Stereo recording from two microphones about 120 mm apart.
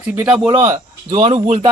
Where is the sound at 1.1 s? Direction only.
50° right (ahead or behind).